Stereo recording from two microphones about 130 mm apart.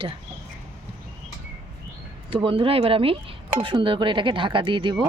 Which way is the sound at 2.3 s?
45° right (ahead or behind).